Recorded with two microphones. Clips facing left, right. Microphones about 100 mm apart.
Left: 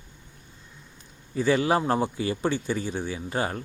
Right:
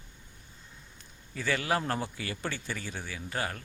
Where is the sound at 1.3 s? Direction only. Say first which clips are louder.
Left 8 dB; 25° left (ahead or behind).